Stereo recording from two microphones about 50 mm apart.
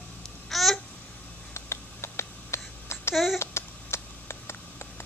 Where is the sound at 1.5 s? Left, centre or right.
Left.